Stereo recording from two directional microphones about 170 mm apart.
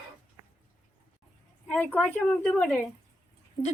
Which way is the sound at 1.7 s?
10° left (ahead or behind).